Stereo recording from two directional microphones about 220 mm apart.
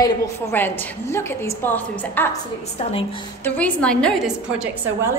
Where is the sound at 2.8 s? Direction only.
25° left (ahead or behind).